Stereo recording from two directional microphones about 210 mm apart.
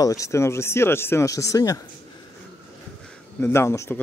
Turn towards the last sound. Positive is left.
turn(degrees=10)  # may be behind; listen again after turning